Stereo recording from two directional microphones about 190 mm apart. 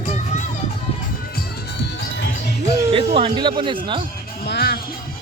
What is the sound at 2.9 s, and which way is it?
Speech, 30° right (ahead or behind).